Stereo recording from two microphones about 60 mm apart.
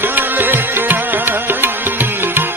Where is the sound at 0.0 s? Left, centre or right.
Right.